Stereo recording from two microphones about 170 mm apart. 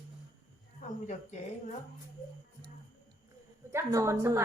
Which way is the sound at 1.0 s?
45° left (ahead or behind).